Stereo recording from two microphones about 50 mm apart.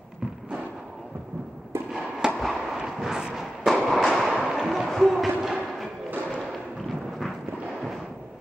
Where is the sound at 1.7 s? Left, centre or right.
Right.